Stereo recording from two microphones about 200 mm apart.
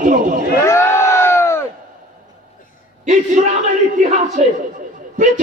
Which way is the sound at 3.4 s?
40° right (ahead or behind).